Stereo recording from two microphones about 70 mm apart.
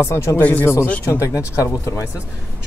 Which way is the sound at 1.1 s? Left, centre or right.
Left.